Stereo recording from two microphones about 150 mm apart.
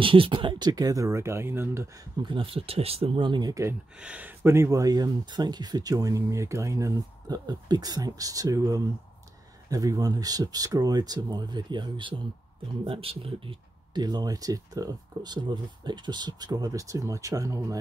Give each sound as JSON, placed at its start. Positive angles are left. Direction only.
{"t": 0.0, "sound": "speech", "side_deg": -35}
{"t": 2.2, "sound": "speech", "side_deg": -35}
{"t": 4.0, "sound": "speech", "side_deg": -10}